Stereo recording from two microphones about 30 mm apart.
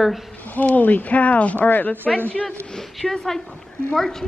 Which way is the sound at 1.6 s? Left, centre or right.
Left.